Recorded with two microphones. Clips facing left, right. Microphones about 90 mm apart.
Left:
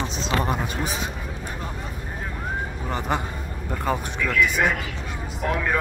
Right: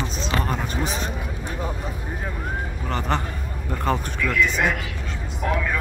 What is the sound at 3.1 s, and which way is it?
Speech, 10° left (ahead or behind).